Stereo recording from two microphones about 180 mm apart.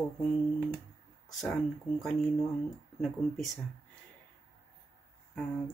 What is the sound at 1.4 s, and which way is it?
Speech, centre (ahead or behind).